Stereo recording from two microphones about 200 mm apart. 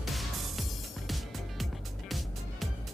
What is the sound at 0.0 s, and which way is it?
Music, centre (ahead or behind).